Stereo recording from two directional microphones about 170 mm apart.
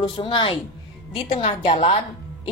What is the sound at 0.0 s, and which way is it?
A woman's voice, 30° left (ahead or behind).